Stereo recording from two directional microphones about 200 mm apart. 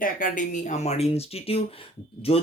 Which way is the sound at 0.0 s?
40° left (ahead or behind).